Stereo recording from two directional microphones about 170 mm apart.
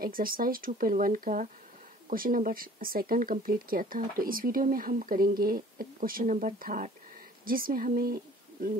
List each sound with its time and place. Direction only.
0.0 s speech: 60° right (ahead or behind)